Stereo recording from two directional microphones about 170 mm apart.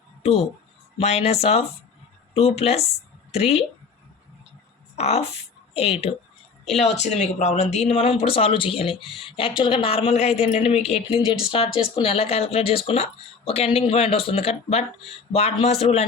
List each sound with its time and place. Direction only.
0.2 s speech: 40° left (ahead or behind)
4.9 s speech: 40° left (ahead or behind)